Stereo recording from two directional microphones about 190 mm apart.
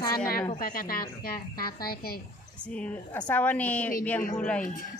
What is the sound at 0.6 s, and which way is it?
Speech, 50° left (ahead or behind).